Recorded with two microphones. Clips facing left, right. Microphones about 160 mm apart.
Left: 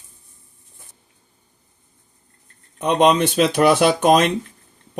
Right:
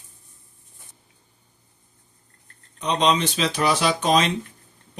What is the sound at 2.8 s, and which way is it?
Speech, 55° left (ahead or behind).